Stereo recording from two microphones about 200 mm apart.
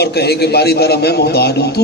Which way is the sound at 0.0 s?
55° left (ahead or behind).